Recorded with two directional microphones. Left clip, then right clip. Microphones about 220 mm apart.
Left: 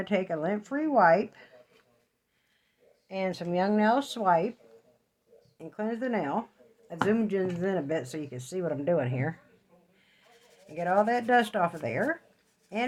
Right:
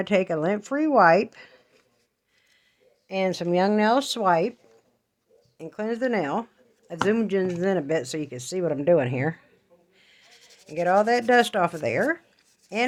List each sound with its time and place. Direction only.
0.0 s speech: 45° right (ahead or behind)
3.1 s speech: 40° right (ahead or behind)
5.5 s speech: 45° right (ahead or behind)
10.0 s bleat: 45° right (ahead or behind)
10.8 s speech: 45° right (ahead or behind)